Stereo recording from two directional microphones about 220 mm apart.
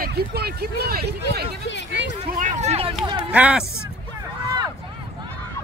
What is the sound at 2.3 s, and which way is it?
Vehicle, 35° right (ahead or behind).